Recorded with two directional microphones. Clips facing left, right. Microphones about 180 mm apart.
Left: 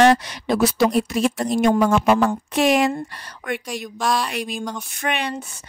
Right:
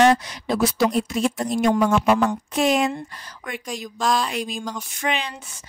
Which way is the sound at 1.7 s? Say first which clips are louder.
Left 2 dB; 45° left (ahead or behind).